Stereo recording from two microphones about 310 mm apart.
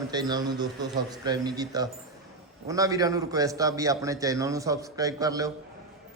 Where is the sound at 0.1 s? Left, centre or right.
Centre.